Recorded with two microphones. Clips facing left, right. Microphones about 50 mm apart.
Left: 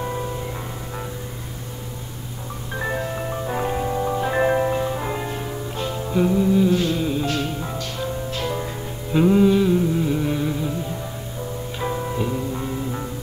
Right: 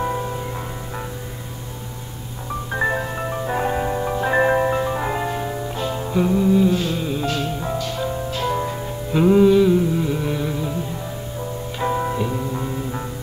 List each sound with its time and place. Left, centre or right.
0.0 s music: centre
2.9 s music: centre
6.0 s music: centre
11.9 s music: right
12.2 s music: centre